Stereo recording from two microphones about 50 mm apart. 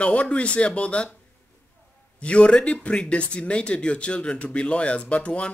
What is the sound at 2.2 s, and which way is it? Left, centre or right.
Speech, left.